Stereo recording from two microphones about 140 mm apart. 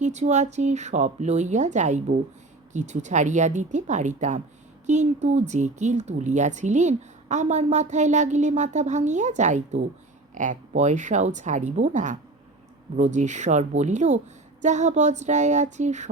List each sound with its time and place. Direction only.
0.0 s speech: 55° right (ahead or behind)